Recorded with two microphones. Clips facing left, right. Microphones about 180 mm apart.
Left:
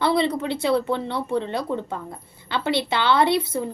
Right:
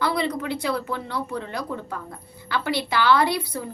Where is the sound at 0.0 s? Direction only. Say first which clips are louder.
Left 4 dB; 25° left (ahead or behind).